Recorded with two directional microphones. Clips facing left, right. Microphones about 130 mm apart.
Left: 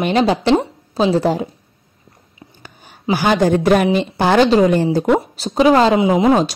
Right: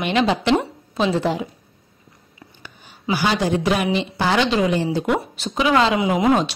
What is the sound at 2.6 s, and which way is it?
A woman's voice, 50° left (ahead or behind).